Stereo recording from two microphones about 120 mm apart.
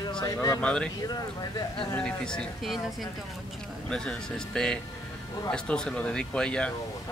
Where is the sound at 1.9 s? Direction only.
5° left (ahead or behind).